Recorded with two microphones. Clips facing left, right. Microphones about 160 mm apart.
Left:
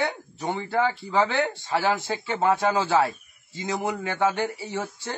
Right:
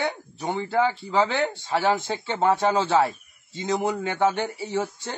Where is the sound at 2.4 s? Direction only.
Centre (ahead or behind).